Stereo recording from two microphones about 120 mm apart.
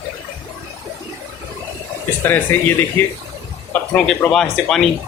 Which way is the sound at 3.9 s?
5° left (ahead or behind).